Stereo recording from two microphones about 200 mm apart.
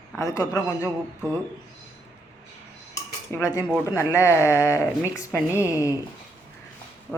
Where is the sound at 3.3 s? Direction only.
15° left (ahead or behind).